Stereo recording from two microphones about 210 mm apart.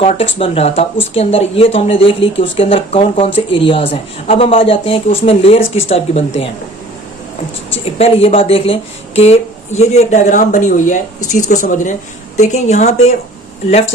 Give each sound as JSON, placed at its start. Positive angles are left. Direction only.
{"t": 0.0, "sound": "speech", "side_deg": 30}
{"t": 7.9, "sound": "speech", "side_deg": 30}